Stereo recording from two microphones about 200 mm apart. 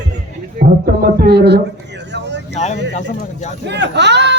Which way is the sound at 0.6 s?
45° right (ahead or behind).